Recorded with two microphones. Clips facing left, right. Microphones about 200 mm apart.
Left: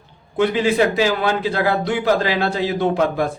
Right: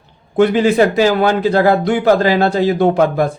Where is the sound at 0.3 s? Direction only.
45° right (ahead or behind).